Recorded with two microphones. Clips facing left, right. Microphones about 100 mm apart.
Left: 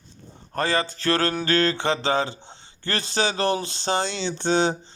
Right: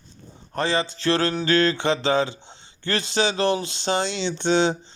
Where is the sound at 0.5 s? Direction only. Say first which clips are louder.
Even; 45° left (ahead or behind).